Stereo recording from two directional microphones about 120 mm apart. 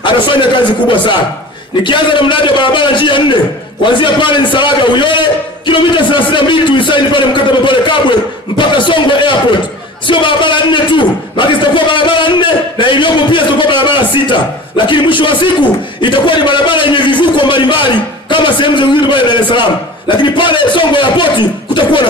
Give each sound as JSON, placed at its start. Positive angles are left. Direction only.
{"t": 0.0, "sound": "a man's voice", "side_deg": 40}